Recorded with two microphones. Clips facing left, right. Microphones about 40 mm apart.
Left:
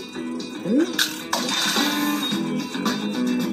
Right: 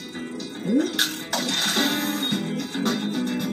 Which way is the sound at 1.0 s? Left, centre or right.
Centre.